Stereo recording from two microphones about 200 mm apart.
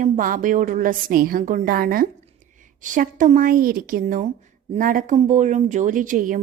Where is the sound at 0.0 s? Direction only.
40° right (ahead or behind).